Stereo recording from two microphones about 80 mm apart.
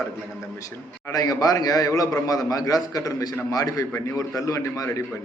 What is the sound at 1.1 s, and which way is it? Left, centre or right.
A man's voice, left.